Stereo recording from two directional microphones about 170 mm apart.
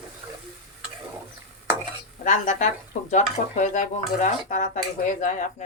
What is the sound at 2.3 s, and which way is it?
Speech, 45° left (ahead or behind).